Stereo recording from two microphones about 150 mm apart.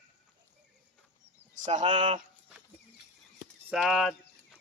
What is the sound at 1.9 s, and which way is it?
Speech, 55° right (ahead or behind).